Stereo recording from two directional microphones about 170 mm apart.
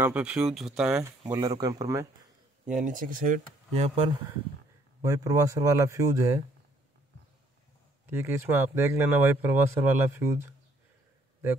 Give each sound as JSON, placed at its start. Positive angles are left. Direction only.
{"t": 0.0, "sound": "speech", "side_deg": -5}
{"t": 1.2, "sound": "speech", "side_deg": -20}
{"t": 2.7, "sound": "speech", "side_deg": -50}
{"t": 3.7, "sound": "speech", "side_deg": -35}
{"t": 5.0, "sound": "speech", "side_deg": -20}
{"t": 8.1, "sound": "speech", "side_deg": -15}